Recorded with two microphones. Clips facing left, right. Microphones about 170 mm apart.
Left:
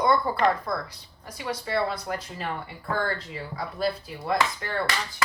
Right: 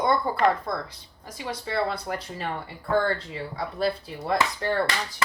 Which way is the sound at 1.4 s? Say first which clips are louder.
Left 1 dB; 25° right (ahead or behind).